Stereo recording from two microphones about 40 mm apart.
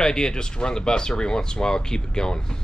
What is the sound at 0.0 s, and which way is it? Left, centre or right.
Speech, centre.